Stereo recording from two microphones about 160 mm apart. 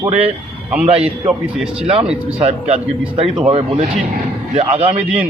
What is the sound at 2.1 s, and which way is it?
Speech, 40° right (ahead or behind).